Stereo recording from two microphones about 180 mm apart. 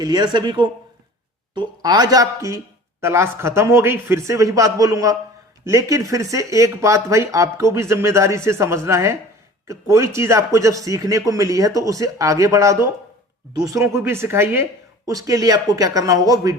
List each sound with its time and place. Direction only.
0.0 s speech: 25° right (ahead or behind)